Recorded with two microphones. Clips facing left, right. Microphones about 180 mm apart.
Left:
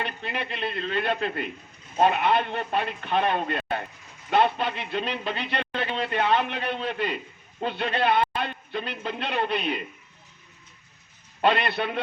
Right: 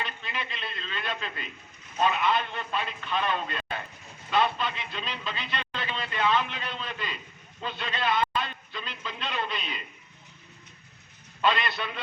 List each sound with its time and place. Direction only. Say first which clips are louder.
0.0 s speech: left 5 dB; 60° left (ahead or behind)
11.4 s speech: left 4 dB; 60° left (ahead or behind)